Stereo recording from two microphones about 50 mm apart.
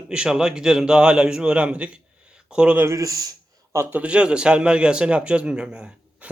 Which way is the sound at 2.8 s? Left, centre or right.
Right.